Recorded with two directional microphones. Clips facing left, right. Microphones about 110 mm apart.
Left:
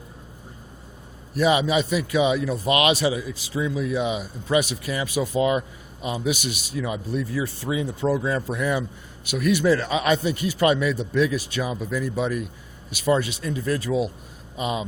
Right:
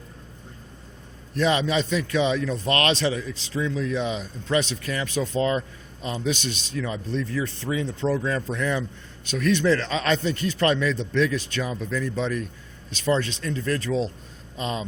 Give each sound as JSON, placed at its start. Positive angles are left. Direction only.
{"t": 1.3, "sound": "a man's voice", "side_deg": 15}